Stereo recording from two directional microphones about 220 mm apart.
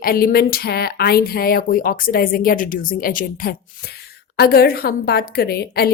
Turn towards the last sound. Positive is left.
turn(degrees=45)  # may be behind; listen again after turning